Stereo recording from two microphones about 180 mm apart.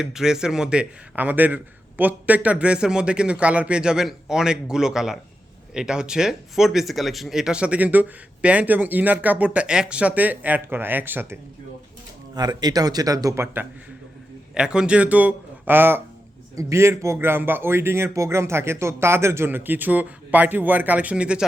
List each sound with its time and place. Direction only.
0.0 s speech: 5° right (ahead or behind)
12.3 s speech: 25° right (ahead or behind); by 21.4 s 5° right (ahead or behind)